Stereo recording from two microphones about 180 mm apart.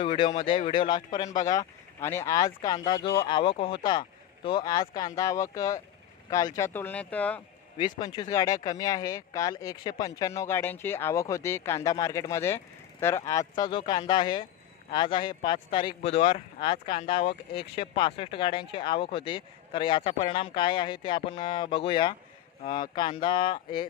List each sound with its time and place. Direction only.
0.0 s speech: 30° left (ahead or behind)
1.3 s speech: 45° left (ahead or behind)
1.5 s speech: 15° left (ahead or behind)
7.8 s speech: 25° left (ahead or behind)